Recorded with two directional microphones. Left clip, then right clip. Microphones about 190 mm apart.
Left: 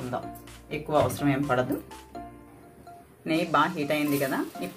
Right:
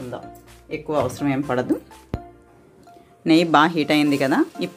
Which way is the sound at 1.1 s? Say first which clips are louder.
Right 3 dB; 55° right (ahead or behind).